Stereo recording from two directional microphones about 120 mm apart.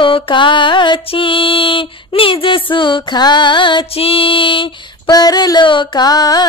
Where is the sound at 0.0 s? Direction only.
40° left (ahead or behind).